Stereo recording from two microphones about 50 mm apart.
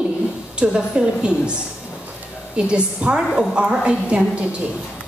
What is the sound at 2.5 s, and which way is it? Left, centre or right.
A woman's voice, centre.